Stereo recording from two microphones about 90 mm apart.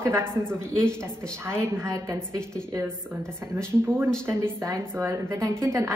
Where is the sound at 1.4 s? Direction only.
30° right (ahead or behind).